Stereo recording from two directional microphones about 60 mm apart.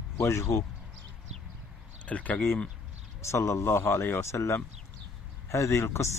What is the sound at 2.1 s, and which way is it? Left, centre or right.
Speech, left.